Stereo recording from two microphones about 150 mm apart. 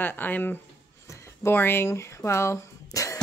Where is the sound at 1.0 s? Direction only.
20° left (ahead or behind).